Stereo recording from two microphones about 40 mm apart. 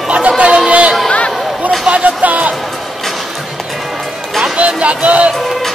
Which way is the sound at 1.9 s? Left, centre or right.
Right.